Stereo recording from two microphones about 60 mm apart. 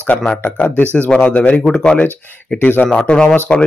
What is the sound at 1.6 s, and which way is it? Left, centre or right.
Speech, centre.